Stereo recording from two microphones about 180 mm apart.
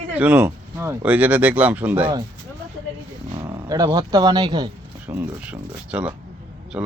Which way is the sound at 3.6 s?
25° right (ahead or behind).